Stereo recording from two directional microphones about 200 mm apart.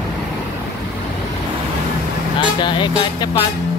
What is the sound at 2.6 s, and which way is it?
Speech, 25° left (ahead or behind).